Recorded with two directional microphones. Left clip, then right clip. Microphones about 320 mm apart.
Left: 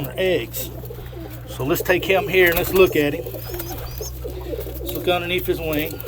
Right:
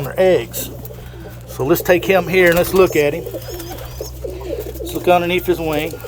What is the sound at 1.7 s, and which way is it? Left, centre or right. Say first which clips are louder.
Speech: right 5 dB; centre.